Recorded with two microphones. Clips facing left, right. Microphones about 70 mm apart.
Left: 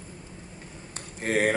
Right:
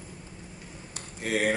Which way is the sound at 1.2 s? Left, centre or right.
Left.